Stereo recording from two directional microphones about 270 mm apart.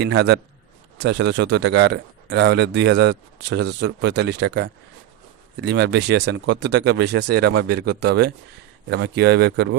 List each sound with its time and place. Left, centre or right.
0.0 s speech: right